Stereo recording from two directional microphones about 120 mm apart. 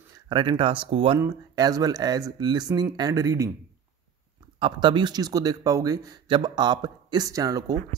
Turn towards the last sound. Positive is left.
turn(degrees=-30)  # may be behind; listen again after turning